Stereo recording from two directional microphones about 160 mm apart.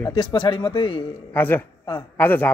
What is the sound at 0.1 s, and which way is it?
Speech, 25° left (ahead or behind).